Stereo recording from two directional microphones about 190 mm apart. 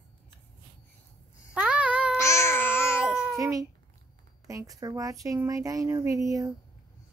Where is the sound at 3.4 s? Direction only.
15° right (ahead or behind).